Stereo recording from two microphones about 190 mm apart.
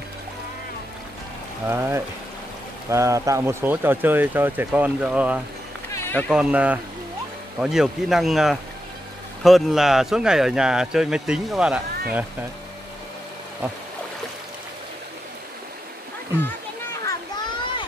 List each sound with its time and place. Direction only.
1.7 s speech: 15° right (ahead or behind)
5.9 s run: 10° left (ahead or behind)
6.3 s speech: 5° right (ahead or behind)
16.4 s a sound: 15° left (ahead or behind)